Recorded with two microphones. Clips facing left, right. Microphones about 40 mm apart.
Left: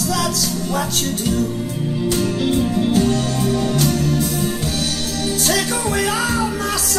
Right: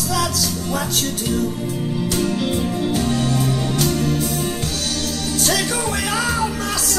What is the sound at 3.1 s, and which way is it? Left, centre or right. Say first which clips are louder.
Music: even; centre.